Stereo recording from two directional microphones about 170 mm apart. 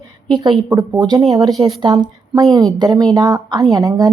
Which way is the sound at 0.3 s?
25° right (ahead or behind).